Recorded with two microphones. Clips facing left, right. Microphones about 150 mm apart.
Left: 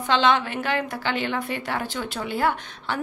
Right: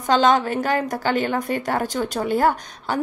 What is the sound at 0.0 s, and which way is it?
A woman's voice, 40° right (ahead or behind).